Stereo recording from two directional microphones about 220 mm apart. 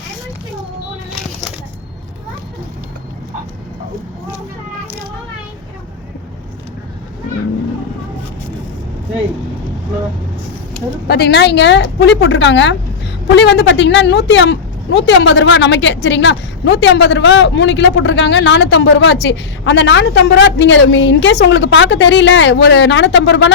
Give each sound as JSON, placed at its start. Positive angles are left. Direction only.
{"t": 11.1, "sound": "a woman's voice", "side_deg": 50}